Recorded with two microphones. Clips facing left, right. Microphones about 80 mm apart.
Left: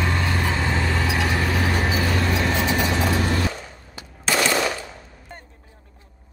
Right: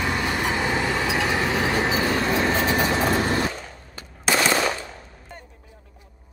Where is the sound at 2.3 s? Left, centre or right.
Right.